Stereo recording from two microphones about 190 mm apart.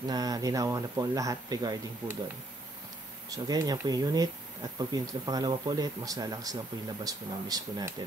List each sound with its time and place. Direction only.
0.1 s speech: 20° right (ahead or behind)
3.3 s speech: 20° right (ahead or behind)